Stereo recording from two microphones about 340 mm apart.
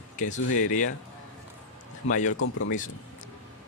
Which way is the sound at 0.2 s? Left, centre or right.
Left.